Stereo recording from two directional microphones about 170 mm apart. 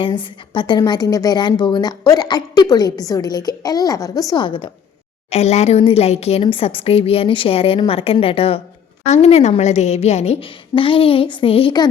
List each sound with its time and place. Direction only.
0.0 s a woman's voice: 30° left (ahead or behind)
5.3 s speech: 40° left (ahead or behind)